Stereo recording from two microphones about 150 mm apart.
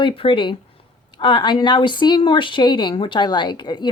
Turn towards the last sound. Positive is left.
turn(degrees=30)  # may be behind; listen again after turning